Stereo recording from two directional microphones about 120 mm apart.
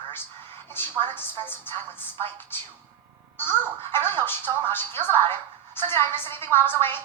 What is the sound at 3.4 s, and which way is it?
A woman's voice, 20° left (ahead or behind).